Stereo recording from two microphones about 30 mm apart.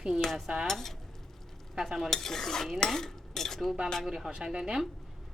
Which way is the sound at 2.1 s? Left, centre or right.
Centre.